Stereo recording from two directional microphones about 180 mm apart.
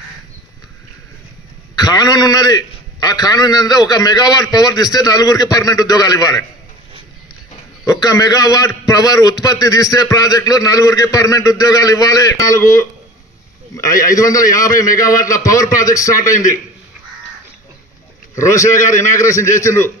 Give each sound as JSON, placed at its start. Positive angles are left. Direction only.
{"t": 1.8, "sound": "a man's voice", "side_deg": 20}
{"t": 7.8, "sound": "a man's voice", "side_deg": 20}
{"t": 13.8, "sound": "a man's voice", "side_deg": 20}
{"t": 18.3, "sound": "a man's voice", "side_deg": 15}